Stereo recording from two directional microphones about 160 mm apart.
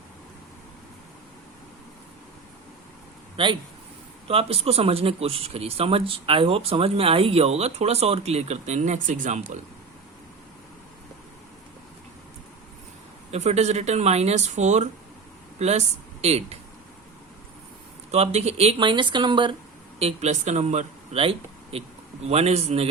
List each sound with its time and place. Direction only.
3.3 s speech: 30° right (ahead or behind); by 9.6 s 50° right (ahead or behind)
13.3 s speech: 45° right (ahead or behind)
18.1 s speech: 40° right (ahead or behind)
20.0 s speech: 40° right (ahead or behind)